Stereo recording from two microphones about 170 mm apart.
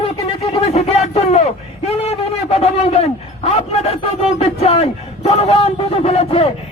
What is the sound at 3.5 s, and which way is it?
A man's voice, 40° left (ahead or behind).